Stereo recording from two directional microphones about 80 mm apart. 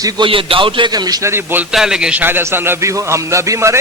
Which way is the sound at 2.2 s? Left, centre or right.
Right.